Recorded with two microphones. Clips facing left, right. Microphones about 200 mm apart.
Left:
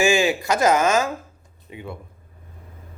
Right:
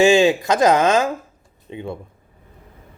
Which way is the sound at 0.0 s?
25° right (ahead or behind).